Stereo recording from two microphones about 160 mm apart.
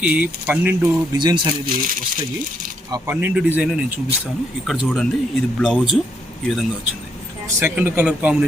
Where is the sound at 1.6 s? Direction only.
60° right (ahead or behind).